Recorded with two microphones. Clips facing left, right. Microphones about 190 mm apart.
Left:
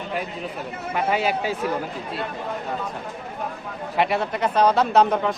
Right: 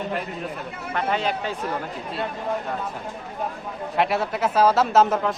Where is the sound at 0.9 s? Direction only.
10° left (ahead or behind).